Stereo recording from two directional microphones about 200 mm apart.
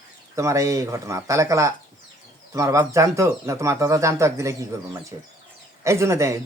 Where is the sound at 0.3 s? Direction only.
15° right (ahead or behind).